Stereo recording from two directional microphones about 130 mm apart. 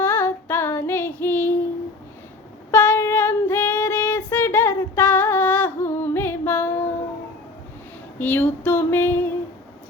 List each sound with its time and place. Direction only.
0.0 s female singing: 15° left (ahead or behind)
2.7 s female singing: 15° left (ahead or behind)
8.2 s female singing: 15° left (ahead or behind)